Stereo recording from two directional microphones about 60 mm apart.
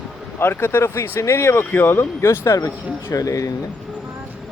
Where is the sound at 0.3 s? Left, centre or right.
Left.